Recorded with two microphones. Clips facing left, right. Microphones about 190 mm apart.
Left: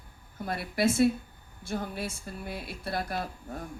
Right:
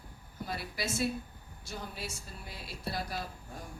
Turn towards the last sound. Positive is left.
turn(degrees=55)  # may be behind; listen again after turning